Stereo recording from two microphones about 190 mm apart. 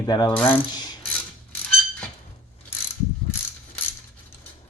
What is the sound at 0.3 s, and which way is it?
Mechanisms, 10° left (ahead or behind).